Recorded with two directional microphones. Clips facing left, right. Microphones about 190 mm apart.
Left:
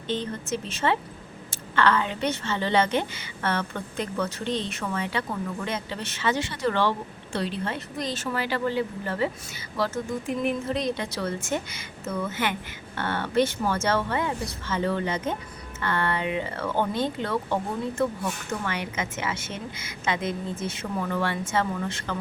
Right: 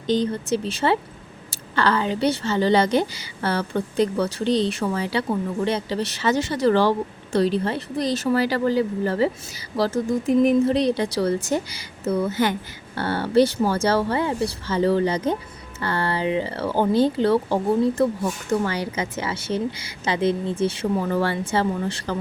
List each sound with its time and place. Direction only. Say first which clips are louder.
0.1 s a woman's voice: right 8 dB; 35° right (ahead or behind)